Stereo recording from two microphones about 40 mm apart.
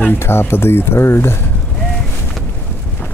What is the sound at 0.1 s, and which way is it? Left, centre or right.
Speech, left.